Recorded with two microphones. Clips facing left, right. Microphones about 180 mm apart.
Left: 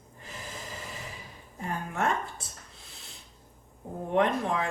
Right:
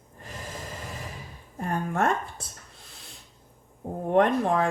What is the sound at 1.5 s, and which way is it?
Speech, 55° right (ahead or behind).